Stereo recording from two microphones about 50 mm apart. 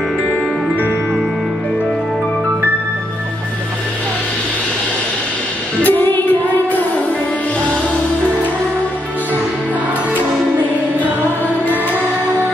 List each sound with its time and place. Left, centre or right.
5.9 s music: left